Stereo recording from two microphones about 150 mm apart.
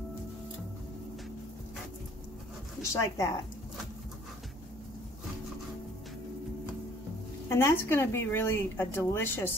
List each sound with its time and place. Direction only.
2.9 s a woman's voice: 20° left (ahead or behind)
7.4 s a woman's voice: 15° left (ahead or behind)